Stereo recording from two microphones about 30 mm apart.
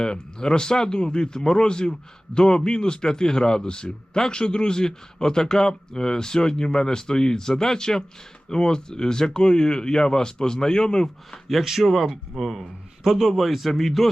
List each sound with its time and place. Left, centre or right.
0.0 s speech: left
11.4 s a man's voice: centre